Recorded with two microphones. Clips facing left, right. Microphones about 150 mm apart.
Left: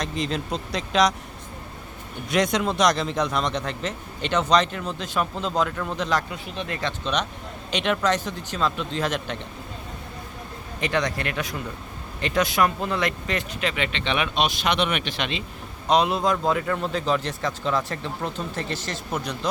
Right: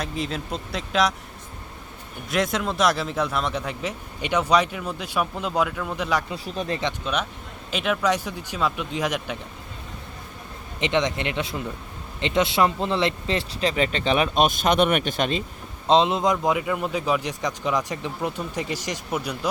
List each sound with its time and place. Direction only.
0.0 s speech: 5° right (ahead or behind)
2.3 s speech: centre (ahead or behind)
6.3 s speech: 35° right (ahead or behind)
7.0 s speech: 5° right (ahead or behind)
10.8 s speech: 20° right (ahead or behind); by 15.4 s 45° right (ahead or behind)
15.9 s speech: 25° right (ahead or behind)